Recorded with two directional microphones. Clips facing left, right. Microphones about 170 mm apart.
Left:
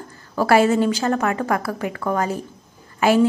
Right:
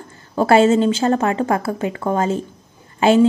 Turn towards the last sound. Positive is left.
turn(degrees=-25)  # may be behind; listen again after turning